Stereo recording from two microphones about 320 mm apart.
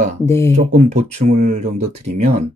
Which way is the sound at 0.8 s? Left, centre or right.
Right.